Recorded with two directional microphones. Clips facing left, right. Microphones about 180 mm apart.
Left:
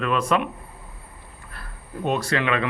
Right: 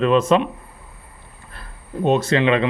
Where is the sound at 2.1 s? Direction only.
25° right (ahead or behind).